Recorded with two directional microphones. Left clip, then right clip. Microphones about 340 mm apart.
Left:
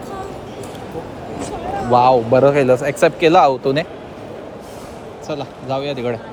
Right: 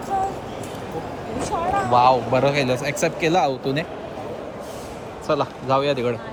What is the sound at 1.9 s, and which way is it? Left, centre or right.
Speech, centre.